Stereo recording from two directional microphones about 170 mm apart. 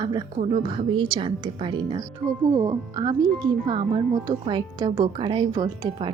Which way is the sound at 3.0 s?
20° right (ahead or behind).